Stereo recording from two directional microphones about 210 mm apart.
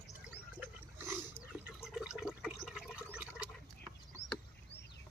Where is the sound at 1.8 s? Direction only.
5° right (ahead or behind).